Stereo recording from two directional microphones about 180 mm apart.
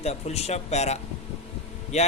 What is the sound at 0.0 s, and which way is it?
Speech, 35° left (ahead or behind).